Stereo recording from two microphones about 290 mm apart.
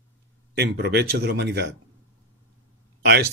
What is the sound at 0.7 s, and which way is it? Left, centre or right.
Speech, right.